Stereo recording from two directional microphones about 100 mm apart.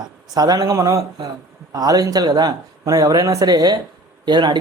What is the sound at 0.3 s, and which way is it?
Speech, 40° right (ahead or behind).